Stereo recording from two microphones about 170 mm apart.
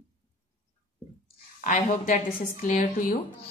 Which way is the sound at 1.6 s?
50° left (ahead or behind).